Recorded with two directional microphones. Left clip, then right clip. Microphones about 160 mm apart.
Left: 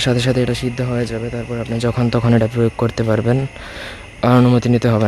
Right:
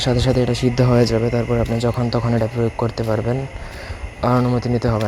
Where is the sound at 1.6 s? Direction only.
15° left (ahead or behind).